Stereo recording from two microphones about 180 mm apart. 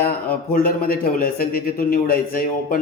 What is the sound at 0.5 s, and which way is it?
A man's voice, 55° left (ahead or behind).